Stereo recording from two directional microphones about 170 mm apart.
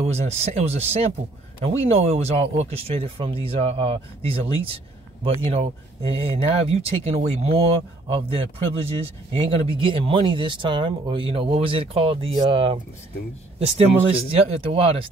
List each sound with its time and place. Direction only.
0.0 s speech: 40° right (ahead or behind)